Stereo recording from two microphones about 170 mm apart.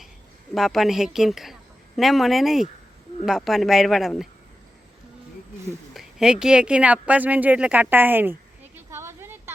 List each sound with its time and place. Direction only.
0.5 s a woman's voice: centre (ahead or behind)
5.9 s speech: centre (ahead or behind)